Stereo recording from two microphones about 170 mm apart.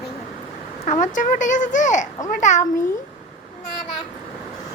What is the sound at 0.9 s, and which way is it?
Speech, 50° left (ahead or behind).